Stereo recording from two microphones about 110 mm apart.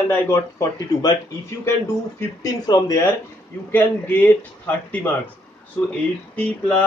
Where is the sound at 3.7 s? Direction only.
20° left (ahead or behind).